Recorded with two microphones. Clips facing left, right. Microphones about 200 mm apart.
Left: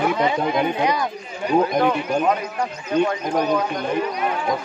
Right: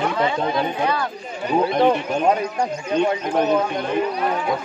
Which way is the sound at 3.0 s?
25° right (ahead or behind).